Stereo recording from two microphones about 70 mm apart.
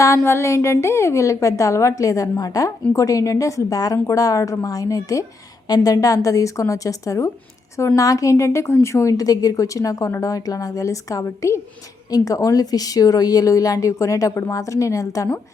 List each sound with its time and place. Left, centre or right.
0.0 s a woman's voice: left
5.6 s a woman's voice: left